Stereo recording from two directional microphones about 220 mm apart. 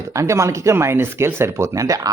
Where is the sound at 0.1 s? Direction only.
15° right (ahead or behind).